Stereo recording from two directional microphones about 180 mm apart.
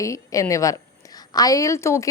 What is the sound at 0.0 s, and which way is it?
A woman's voice, 20° left (ahead or behind).